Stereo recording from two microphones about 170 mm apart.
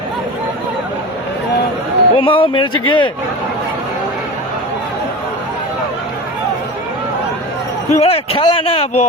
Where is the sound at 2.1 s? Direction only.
30° left (ahead or behind).